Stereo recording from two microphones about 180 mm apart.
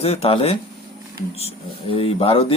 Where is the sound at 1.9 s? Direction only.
30° left (ahead or behind).